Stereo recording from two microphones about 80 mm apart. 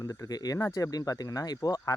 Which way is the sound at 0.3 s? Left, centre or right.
Left.